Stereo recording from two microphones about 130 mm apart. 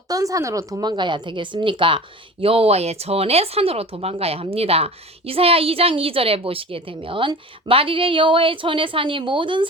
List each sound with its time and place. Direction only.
0.1 s speech: 25° right (ahead or behind)